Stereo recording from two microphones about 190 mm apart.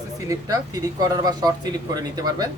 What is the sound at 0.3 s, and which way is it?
Speech, 20° right (ahead or behind).